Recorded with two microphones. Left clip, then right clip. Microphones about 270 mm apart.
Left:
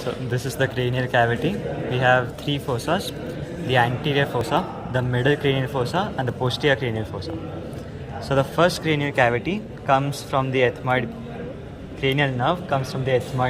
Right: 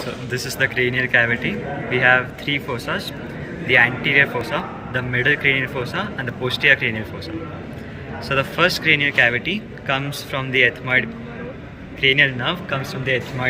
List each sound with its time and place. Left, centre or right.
0.3 s a man's voice: left
4.0 s a man's voice: left
8.3 s a man's voice: left
12.0 s speech: centre